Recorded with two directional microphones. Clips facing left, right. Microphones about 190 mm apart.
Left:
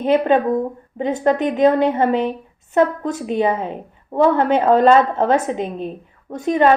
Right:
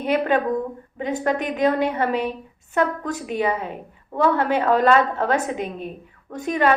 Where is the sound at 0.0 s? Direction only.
25° left (ahead or behind).